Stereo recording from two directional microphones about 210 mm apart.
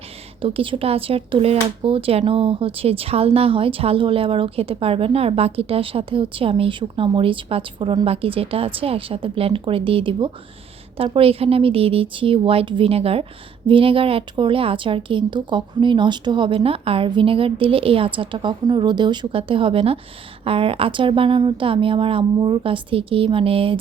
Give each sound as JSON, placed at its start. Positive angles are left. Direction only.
{"t": 0.4, "sound": "speech", "side_deg": -25}